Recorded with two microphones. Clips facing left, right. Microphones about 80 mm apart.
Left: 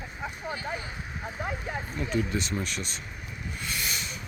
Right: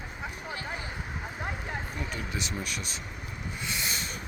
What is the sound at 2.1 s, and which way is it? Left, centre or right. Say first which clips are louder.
Speech: left 6 dB; centre.